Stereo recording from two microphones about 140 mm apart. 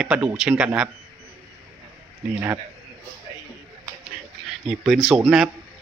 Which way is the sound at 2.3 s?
15° right (ahead or behind).